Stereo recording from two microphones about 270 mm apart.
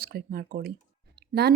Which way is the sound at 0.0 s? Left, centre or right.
Right.